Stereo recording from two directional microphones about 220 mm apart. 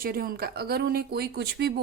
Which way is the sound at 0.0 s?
40° right (ahead or behind).